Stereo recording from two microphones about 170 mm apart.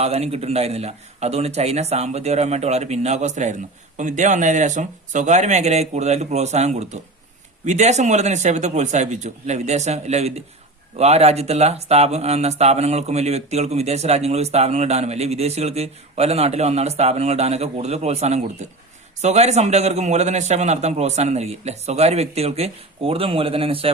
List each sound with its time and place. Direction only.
0.0 s speech: 40° right (ahead or behind)